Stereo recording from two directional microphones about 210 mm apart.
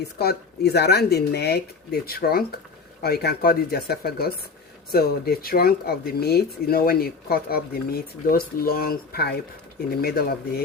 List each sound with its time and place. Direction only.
0.0 s speech: 50° left (ahead or behind)